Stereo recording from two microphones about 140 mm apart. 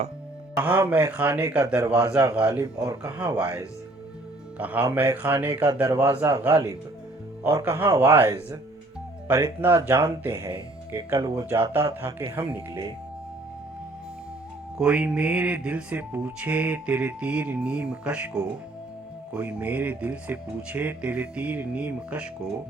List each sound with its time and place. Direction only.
0.5 s speech: 15° right (ahead or behind)
11.1 s speech: 30° right (ahead or behind)
11.4 s speech: 15° right (ahead or behind)
14.8 s speech: 10° right (ahead or behind)